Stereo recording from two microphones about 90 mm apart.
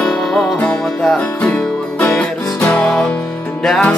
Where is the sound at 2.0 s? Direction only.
20° left (ahead or behind); by 3.9 s 5° left (ahead or behind).